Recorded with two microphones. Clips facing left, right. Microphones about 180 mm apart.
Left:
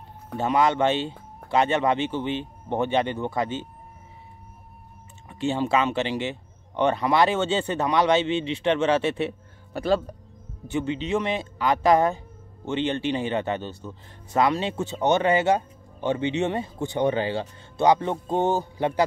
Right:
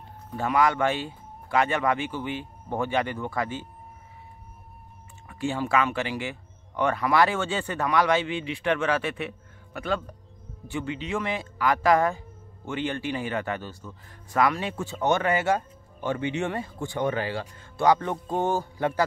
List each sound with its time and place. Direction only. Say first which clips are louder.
0.4 s speech: left 2 dB; 25° left (ahead or behind)
5.3 s speech: left 2 dB; 25° left (ahead or behind)
10.7 s speech: left 5 dB; 20° left (ahead or behind)